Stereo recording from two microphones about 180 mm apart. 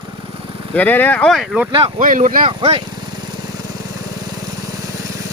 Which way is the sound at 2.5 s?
30° right (ahead or behind).